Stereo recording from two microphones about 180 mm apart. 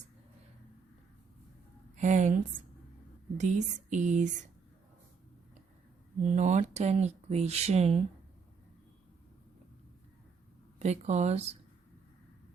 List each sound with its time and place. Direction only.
2.0 s a woman's voice: 40° right (ahead or behind)
6.2 s speech: 40° right (ahead or behind)
10.8 s speech: 40° right (ahead or behind)